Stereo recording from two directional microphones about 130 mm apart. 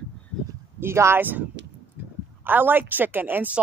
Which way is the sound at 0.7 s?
20° right (ahead or behind).